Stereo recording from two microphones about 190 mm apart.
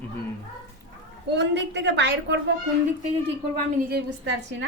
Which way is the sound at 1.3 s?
65° right (ahead or behind).